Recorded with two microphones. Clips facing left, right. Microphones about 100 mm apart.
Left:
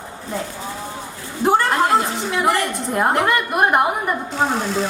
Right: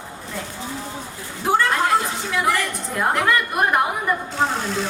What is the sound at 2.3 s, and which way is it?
A woman's voice, 25° left (ahead or behind).